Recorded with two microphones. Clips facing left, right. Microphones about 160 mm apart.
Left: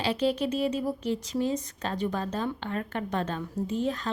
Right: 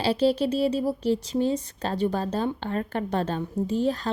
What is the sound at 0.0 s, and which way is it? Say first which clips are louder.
Speech: right 4 dB; 35° right (ahead or behind).